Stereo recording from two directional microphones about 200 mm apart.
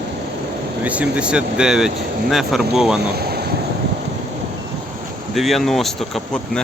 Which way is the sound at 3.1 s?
50° right (ahead or behind).